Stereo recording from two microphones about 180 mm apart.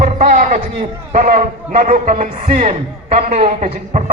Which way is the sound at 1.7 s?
40° right (ahead or behind).